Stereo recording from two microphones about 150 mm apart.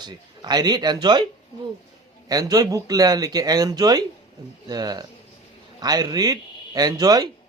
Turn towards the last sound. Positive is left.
turn(degrees=-25)  # may be behind; listen again after turning